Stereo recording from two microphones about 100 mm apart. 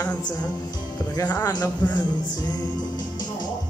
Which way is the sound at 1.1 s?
30° left (ahead or behind).